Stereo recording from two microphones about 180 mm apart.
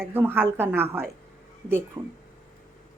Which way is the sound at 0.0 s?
10° right (ahead or behind).